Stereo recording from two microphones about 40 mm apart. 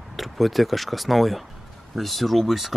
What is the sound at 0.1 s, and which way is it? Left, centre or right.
Speech, centre.